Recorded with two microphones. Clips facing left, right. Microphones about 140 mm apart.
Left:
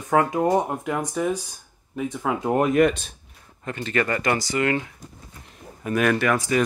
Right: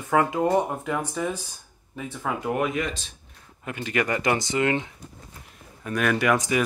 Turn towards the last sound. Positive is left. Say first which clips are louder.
# left 1 dB
turn(degrees=-15)  # may be behind; listen again after turning